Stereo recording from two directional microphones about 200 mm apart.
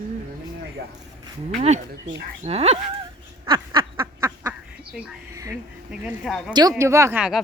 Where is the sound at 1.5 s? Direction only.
35° right (ahead or behind).